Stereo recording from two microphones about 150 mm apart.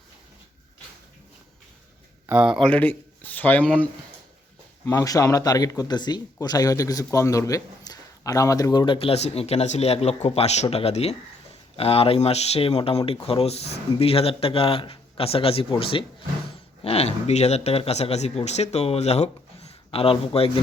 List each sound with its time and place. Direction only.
2.2 s speech: 10° right (ahead or behind)
2.6 s speech: 10° left (ahead or behind)
4.9 s a man's voice: 20° left (ahead or behind); by 20.5 s 40° left (ahead or behind)